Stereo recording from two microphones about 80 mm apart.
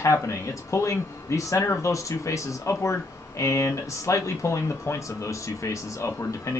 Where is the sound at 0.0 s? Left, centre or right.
Left.